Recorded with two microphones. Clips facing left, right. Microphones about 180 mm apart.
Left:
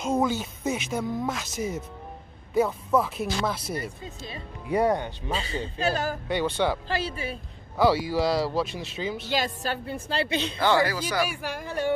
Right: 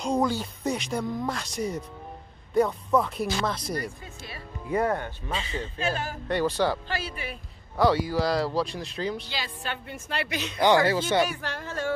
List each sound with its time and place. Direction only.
0.0 s speech: centre (ahead or behind)
4.0 s speech: 20° left (ahead or behind)
5.3 s a woman's voice: 35° left (ahead or behind)
6.2 s speech: centre (ahead or behind)
6.9 s speech: 30° left (ahead or behind)
7.7 s speech: 5° left (ahead or behind)
9.3 s a woman's voice: 45° left (ahead or behind); by 10.6 s 30° left (ahead or behind)
10.6 s speech: 20° right (ahead or behind)
11.2 s speech: 10° left (ahead or behind)